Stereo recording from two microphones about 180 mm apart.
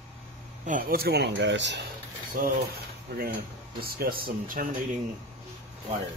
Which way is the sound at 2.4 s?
55° right (ahead or behind).